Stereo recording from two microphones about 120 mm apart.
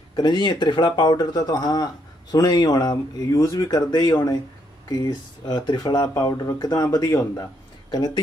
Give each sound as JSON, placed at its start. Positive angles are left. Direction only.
{"t": 0.1, "sound": "speech", "side_deg": 35}
{"t": 7.9, "sound": "speech", "side_deg": 35}